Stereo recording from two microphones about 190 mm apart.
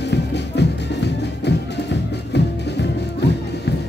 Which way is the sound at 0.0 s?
60° left (ahead or behind).